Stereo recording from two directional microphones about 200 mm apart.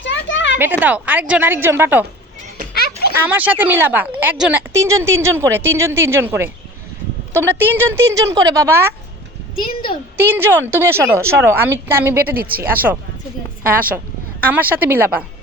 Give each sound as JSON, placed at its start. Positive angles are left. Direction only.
{"t": 0.0, "sound": "a sound", "side_deg": 65}
{"t": 0.6, "sound": "a woman's voice", "side_deg": -10}
{"t": 3.2, "sound": "a woman's voice", "side_deg": -10}
{"t": 9.6, "sound": "a woman's voice", "side_deg": 25}
{"t": 10.2, "sound": "a woman's voice", "side_deg": -10}
{"t": 12.4, "sound": "speech", "side_deg": -50}
{"t": 12.7, "sound": "a woman's voice", "side_deg": -10}
{"t": 14.4, "sound": "a woman's voice", "side_deg": -10}